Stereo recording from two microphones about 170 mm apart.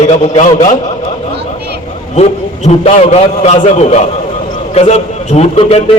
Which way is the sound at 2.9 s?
40° left (ahead or behind).